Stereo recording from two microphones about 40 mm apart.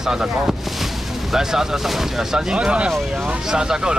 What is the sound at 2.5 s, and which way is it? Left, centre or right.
Speech, right.